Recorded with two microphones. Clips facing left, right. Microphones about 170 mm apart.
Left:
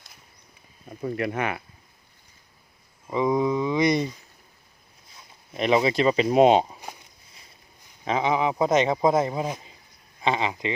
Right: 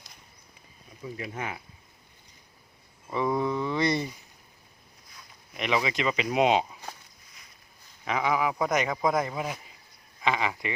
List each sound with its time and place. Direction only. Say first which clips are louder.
0.9 s speech: left 10 dB; 65° left (ahead or behind)
3.1 s speech: left 4 dB; 15° left (ahead or behind)
5.1 s speech: left 7 dB; 35° left (ahead or behind)
8.0 s speech: left 3 dB; 25° left (ahead or behind)